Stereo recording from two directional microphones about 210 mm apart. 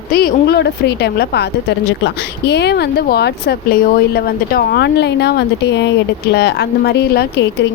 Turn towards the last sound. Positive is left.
turn(degrees=50)  # may be behind; listen again after turning